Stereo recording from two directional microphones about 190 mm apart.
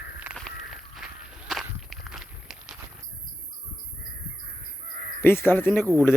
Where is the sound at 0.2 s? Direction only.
Centre (ahead or behind).